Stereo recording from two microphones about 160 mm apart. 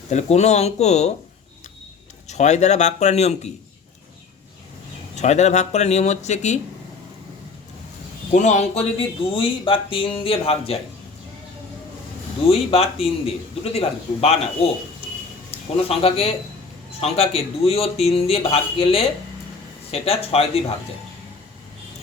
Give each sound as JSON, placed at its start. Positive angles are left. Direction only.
{"t": 0.1, "sound": "speech", "side_deg": 45}
{"t": 2.2, "sound": "speech", "side_deg": 45}
{"t": 5.1, "sound": "speech", "side_deg": 45}
{"t": 8.3, "sound": "speech", "side_deg": 45}
{"t": 12.5, "sound": "speech", "side_deg": 40}
{"t": 15.9, "sound": "speech", "side_deg": 40}